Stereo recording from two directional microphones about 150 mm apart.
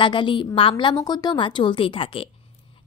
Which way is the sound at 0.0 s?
35° left (ahead or behind).